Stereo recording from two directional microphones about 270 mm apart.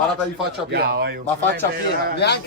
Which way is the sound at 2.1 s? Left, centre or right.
Left.